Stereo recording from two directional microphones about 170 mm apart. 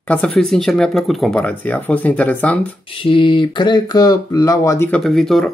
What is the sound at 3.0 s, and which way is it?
Speech, 30° left (ahead or behind).